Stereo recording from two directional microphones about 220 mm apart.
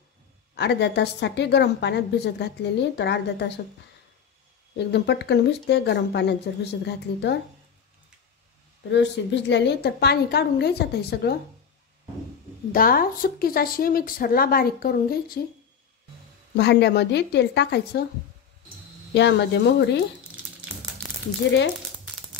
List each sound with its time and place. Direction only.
0.6 s a woman's voice: 50° left (ahead or behind)
4.7 s a woman's voice: 50° left (ahead or behind)
8.9 s a woman's voice: 55° left (ahead or behind)
12.7 s speech: 40° left (ahead or behind)
16.5 s a woman's voice: 50° left (ahead or behind)
19.1 s a woman's voice: 50° left (ahead or behind)